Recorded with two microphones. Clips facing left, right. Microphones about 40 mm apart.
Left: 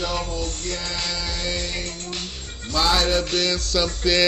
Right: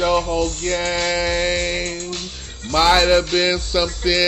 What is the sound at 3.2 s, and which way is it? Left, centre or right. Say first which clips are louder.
Music: right 5 dB; right.